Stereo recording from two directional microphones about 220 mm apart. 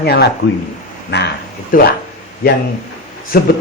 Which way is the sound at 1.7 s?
40° left (ahead or behind).